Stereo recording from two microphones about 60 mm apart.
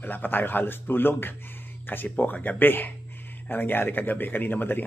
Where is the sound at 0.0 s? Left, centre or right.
Left.